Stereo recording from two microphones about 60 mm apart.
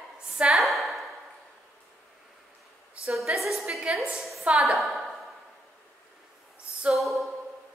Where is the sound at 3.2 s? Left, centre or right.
Centre.